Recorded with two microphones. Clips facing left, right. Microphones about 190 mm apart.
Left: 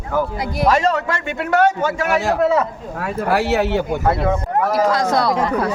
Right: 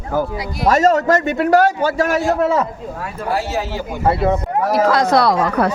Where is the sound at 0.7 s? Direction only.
45° right (ahead or behind).